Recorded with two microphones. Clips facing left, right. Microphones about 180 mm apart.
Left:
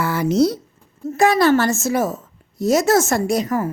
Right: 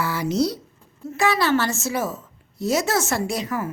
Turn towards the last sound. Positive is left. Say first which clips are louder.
# left 6 dB
turn(degrees=45)  # may be behind; listen again after turning